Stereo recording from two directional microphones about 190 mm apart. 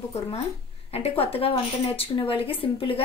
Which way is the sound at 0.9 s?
30° left (ahead or behind).